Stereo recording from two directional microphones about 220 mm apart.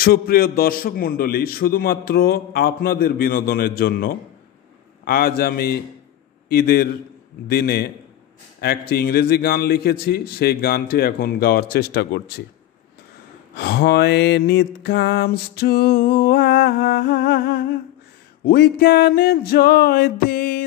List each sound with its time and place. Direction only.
0.0 s a man's voice: 45° left (ahead or behind)
13.6 s a man's voice: 45° left (ahead or behind)